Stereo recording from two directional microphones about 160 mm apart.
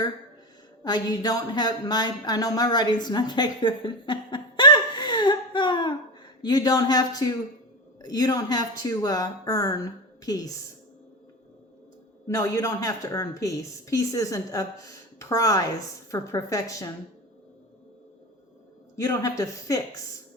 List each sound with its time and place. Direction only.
0.9 s a woman's voice: 25° left (ahead or behind)
12.3 s a woman's voice: 20° left (ahead or behind)
18.9 s a woman's voice: 20° left (ahead or behind)